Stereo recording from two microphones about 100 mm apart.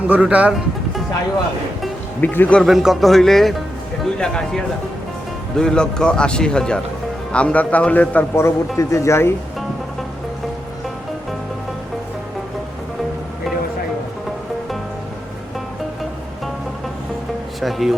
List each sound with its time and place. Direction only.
0.1 s speech: 15° right (ahead or behind)
2.2 s a man's voice: 20° left (ahead or behind)
2.6 s a man's voice: centre (ahead or behind); by 8.2 s 15° left (ahead or behind)
8.4 s speech: 30° left (ahead or behind)
17.6 s music: centre (ahead or behind)